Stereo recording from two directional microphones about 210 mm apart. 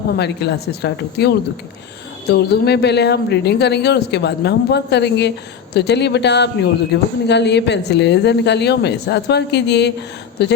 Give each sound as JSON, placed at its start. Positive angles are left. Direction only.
{"t": 0.2, "sound": "speech", "side_deg": 55}